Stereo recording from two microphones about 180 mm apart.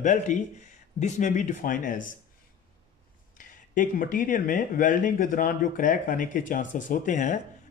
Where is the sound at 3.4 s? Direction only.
45° left (ahead or behind).